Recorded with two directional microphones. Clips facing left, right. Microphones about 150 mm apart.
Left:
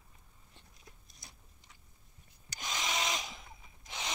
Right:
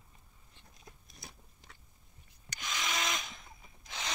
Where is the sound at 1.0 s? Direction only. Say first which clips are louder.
Right 5 dB; 65° right (ahead or behind).